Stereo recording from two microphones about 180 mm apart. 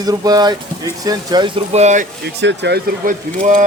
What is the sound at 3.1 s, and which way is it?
Speech, 50° right (ahead or behind).